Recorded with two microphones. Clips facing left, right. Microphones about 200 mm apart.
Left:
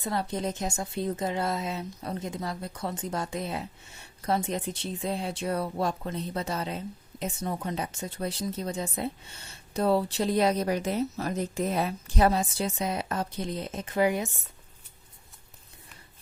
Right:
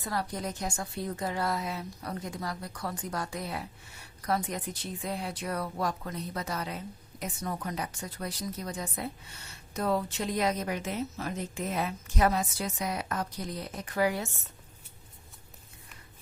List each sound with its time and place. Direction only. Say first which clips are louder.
0.0 s a woman's voice: left 4 dB; 25° left (ahead or behind)